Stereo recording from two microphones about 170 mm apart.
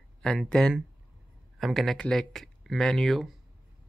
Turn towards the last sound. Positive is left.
turn(degrees=0)  # may be behind; listen again after turning